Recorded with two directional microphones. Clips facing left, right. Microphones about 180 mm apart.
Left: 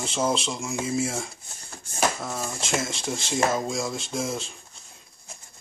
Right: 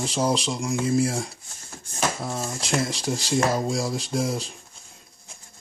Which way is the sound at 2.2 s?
25° right (ahead or behind).